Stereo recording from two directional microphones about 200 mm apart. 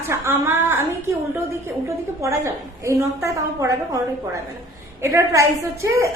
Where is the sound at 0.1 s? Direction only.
10° right (ahead or behind).